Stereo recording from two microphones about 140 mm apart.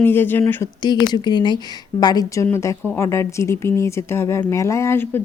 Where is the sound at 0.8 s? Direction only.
30° left (ahead or behind).